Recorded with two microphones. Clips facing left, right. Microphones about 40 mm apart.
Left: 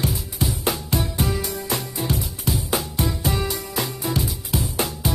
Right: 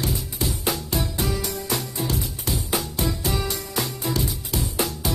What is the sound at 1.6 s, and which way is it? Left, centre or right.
Music, centre.